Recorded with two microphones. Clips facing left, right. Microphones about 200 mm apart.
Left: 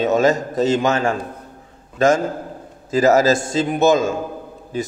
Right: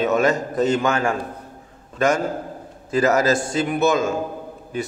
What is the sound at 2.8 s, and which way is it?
A man's voice, 25° left (ahead or behind).